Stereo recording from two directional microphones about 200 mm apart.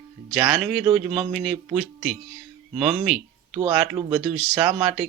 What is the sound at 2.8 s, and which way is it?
Speech, centre (ahead or behind).